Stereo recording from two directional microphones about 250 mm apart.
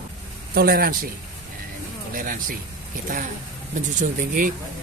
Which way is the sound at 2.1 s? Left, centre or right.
Right.